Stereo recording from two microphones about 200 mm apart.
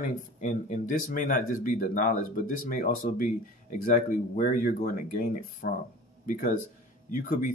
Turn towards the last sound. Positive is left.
turn(degrees=40)  # may be behind; listen again after turning